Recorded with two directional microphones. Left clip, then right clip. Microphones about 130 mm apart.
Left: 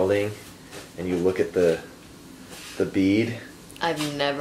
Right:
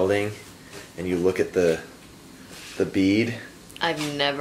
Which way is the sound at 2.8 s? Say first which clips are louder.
Even; 30° right (ahead or behind).